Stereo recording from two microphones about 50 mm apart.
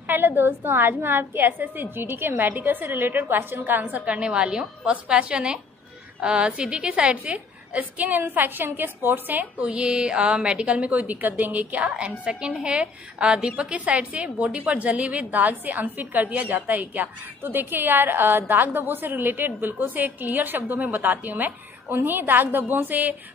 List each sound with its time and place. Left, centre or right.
0.0 s a woman's voice: right
4.0 s a woman's voice: right
9.7 s a woman's voice: centre; by 23.1 s right